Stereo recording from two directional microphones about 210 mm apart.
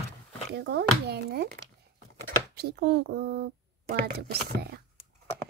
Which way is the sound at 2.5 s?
50° right (ahead or behind).